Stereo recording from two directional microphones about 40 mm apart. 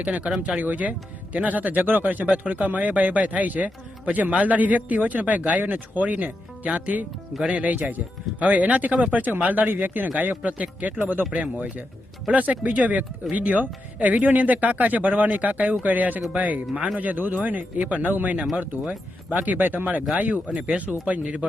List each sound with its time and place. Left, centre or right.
0.4 s speech: right
18.1 s speech: right
20.5 s speech: right